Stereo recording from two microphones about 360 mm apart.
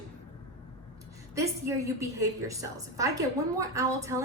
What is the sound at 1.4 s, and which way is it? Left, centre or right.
A woman's voice, centre.